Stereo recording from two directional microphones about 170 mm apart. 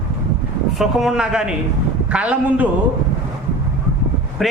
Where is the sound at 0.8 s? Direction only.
Centre (ahead or behind).